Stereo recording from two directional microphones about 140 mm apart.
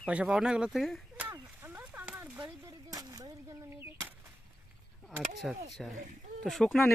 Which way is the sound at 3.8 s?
15° right (ahead or behind).